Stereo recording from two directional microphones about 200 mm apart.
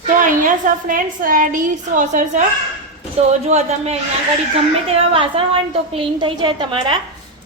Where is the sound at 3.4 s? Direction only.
35° right (ahead or behind).